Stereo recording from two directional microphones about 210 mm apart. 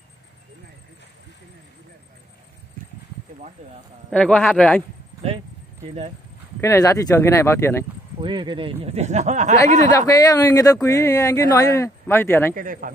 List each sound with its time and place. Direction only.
4.1 s speech: 5° left (ahead or behind)
5.9 s speech: 30° right (ahead or behind)
6.6 s speech: 15° left (ahead or behind)
8.2 s speech: 20° right (ahead or behind)
9.9 s speech: 15° left (ahead or behind)
12.5 s speech: 40° right (ahead or behind)